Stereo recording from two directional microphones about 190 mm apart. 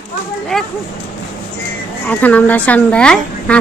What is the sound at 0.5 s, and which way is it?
Speech, centre (ahead or behind).